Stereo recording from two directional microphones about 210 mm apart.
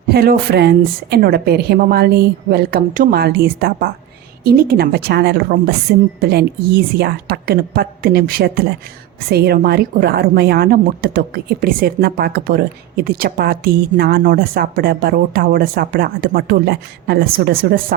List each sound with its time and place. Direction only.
0.1 s a woman's voice: 45° right (ahead or behind)